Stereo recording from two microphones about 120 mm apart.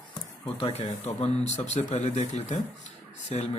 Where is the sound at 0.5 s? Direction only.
60° left (ahead or behind); by 2.6 s 85° left.